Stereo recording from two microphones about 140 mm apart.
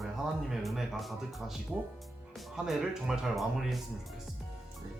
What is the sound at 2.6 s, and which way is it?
Speech, 5° right (ahead or behind).